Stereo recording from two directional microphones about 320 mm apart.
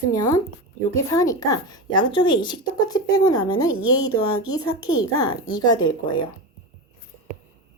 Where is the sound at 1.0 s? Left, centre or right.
Centre.